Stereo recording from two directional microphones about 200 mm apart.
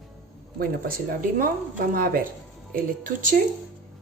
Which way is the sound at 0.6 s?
45° right (ahead or behind).